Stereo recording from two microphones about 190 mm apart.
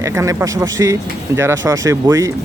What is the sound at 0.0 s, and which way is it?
Speech, 15° right (ahead or behind).